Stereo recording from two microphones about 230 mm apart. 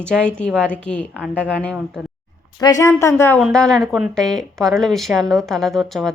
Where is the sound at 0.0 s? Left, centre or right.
Centre.